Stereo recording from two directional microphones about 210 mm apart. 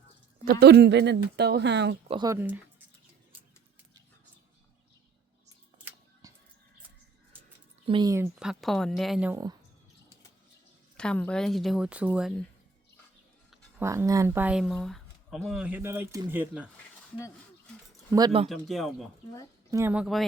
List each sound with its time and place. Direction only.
0.4 s speech: 50° right (ahead or behind)
2.0 s speech: 20° right (ahead or behind)
6.2 s a sound: 15° right (ahead or behind)
7.9 s speech: 20° right (ahead or behind)
8.4 s speech: centre (ahead or behind)
10.9 s speech: 5° left (ahead or behind)
13.5 s speech: 10° right (ahead or behind)
18.4 s speech: centre (ahead or behind)